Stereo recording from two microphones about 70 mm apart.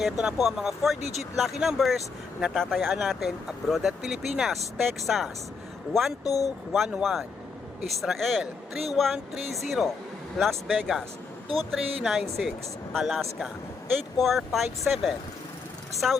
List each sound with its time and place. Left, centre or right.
0.0 s speech: centre
6.2 s speech: left
6.7 s speech: centre